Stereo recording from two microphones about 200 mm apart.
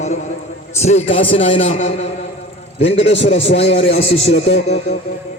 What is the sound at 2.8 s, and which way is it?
A man's voice, 30° left (ahead or behind).